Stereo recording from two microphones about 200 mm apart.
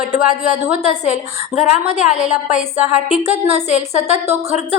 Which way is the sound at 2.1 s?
35° left (ahead or behind).